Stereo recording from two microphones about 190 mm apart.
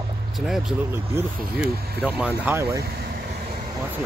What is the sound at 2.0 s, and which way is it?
Speech, 10° right (ahead or behind).